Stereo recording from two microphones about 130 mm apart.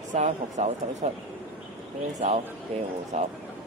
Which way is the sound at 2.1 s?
55° right (ahead or behind).